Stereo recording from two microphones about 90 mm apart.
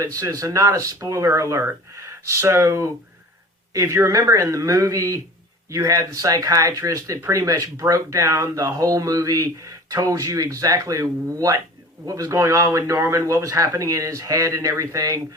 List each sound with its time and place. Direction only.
0.0 s speech: 40° right (ahead or behind)